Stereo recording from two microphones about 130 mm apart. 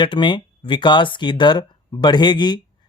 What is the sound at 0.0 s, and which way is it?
Speech, 40° left (ahead or behind).